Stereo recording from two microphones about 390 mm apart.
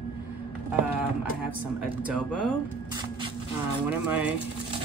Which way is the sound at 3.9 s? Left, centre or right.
Centre.